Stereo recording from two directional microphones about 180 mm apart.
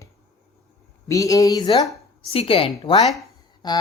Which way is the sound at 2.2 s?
30° left (ahead or behind).